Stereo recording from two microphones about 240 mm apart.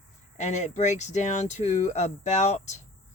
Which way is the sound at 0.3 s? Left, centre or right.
Left.